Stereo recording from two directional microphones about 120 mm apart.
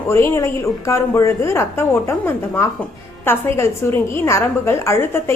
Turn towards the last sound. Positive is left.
turn(degrees=20)  # may be behind; listen again after turning